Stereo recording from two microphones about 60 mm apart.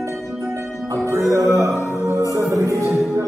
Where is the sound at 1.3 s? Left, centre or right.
Right.